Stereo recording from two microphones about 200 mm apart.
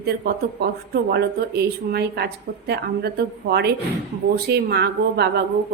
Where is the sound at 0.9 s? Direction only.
55° right (ahead or behind).